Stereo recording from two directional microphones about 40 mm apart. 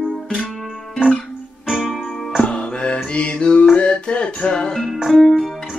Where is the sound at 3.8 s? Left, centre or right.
Left.